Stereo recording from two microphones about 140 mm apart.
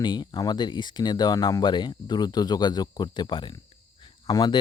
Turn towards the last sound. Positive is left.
turn(degrees=30)  # may be behind; listen again after turning